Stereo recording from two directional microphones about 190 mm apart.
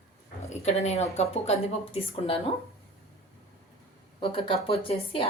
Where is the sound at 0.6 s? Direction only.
35° left (ahead or behind).